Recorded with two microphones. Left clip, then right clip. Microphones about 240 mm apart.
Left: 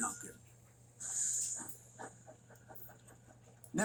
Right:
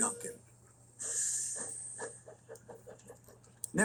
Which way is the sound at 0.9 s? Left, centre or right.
Right.